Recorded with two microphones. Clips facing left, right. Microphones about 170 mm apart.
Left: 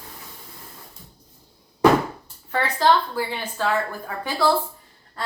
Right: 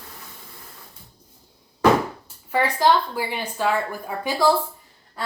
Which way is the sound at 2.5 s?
15° right (ahead or behind).